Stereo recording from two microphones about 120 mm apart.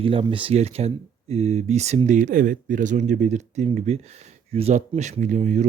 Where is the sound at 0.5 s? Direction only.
60° right (ahead or behind).